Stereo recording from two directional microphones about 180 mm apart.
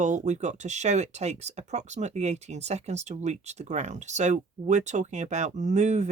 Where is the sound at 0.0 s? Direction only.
40° right (ahead or behind).